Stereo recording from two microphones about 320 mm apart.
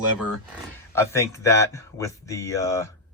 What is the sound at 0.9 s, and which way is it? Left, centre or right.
Speech, centre.